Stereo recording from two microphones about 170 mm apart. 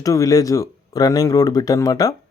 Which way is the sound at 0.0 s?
20° left (ahead or behind).